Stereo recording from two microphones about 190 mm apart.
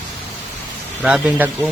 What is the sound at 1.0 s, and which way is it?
Speech, 5° right (ahead or behind).